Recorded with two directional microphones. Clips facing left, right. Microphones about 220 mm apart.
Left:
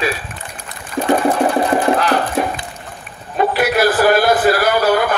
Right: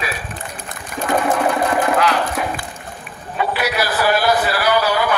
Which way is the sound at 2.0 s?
30° left (ahead or behind).